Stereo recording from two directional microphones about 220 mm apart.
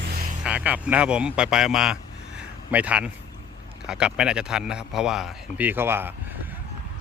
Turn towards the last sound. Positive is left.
turn(degrees=-10)  # may be behind; listen again after turning